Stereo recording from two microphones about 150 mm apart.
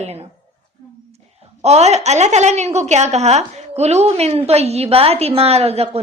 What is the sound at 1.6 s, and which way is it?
A woman's voice, 45° right (ahead or behind).